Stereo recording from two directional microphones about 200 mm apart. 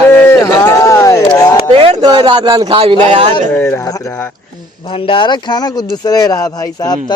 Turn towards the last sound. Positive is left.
turn(degrees=20)  # may be behind; listen again after turning